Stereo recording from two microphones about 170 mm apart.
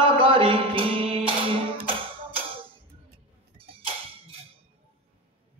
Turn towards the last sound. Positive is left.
turn(degrees=-35)  # may be behind; listen again after turning